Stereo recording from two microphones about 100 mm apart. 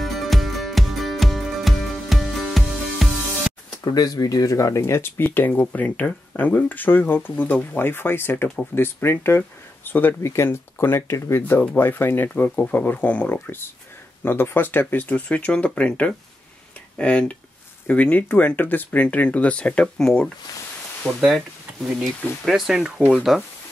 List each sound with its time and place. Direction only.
0.0 s music: centre (ahead or behind)
3.8 s speech: 40° left (ahead or behind); by 20.2 s 10° left (ahead or behind)
21.0 s speech: centre (ahead or behind)